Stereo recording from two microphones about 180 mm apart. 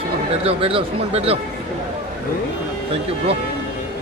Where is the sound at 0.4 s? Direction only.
30° right (ahead or behind).